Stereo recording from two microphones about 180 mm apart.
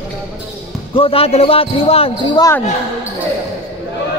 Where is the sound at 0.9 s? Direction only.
30° left (ahead or behind).